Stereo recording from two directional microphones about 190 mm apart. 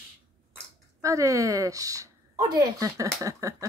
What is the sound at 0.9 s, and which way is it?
Speech, 15° right (ahead or behind).